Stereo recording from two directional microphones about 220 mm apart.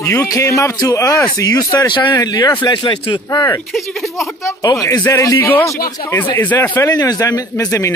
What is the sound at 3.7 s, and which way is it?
Speech, centre (ahead or behind).